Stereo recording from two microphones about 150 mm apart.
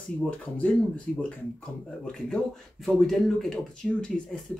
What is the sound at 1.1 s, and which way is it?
Speech, 5° left (ahead or behind).